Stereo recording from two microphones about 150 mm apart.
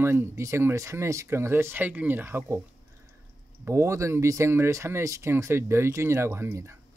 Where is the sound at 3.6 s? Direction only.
20° right (ahead or behind).